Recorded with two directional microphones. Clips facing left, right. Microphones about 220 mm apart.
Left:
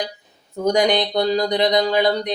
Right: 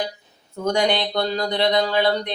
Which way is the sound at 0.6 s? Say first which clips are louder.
Left 3 dB; 15° left (ahead or behind).